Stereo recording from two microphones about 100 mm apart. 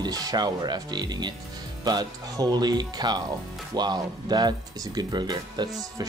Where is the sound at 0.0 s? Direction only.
40° right (ahead or behind).